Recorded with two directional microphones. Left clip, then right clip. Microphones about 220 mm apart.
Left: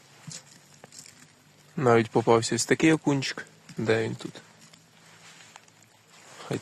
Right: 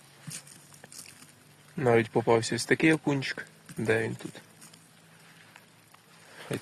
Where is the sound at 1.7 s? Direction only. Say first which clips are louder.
Left 3 dB; 20° left (ahead or behind).